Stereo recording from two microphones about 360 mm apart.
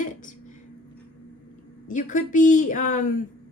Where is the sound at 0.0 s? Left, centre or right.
Left.